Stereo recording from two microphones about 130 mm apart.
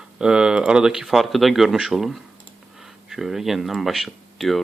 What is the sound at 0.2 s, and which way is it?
Speech, 5° right (ahead or behind).